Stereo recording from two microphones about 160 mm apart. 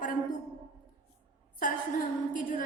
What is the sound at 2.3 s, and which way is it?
Speech, 55° left (ahead or behind).